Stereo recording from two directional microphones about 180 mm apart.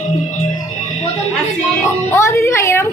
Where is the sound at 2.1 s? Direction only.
15° left (ahead or behind).